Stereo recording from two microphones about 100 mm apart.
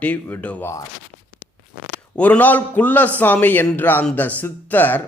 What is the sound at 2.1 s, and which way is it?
A man's voice, 15° left (ahead or behind).